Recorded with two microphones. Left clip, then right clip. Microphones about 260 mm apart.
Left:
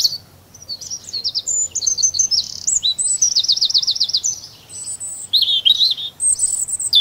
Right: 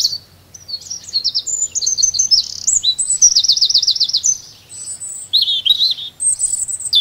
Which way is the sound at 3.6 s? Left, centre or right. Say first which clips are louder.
Right 3 dB; centre.